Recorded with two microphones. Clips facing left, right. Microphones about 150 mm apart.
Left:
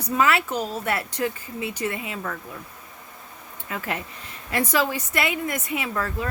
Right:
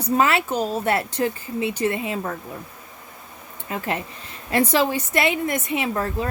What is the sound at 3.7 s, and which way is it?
Speech, 25° right (ahead or behind).